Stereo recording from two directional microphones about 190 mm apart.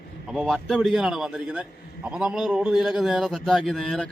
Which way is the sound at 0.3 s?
Centre (ahead or behind).